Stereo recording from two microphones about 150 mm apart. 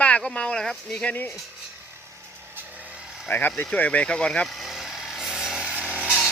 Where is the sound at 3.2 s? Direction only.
15° left (ahead or behind).